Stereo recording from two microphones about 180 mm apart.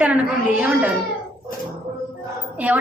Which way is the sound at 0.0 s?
10° right (ahead or behind).